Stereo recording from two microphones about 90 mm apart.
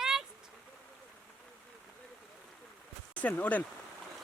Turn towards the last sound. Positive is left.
turn(degrees=15)  # may be behind; listen again after turning